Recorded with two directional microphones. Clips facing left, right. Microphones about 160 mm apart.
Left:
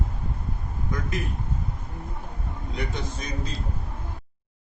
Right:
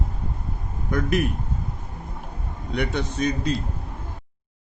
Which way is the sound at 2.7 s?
70° right (ahead or behind).